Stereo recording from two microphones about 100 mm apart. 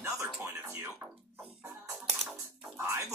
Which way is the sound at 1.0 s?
20° right (ahead or behind).